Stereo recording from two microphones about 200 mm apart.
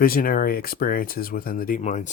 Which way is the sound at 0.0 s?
45° left (ahead or behind).